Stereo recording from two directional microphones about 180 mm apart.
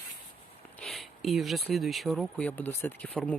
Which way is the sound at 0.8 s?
Centre (ahead or behind).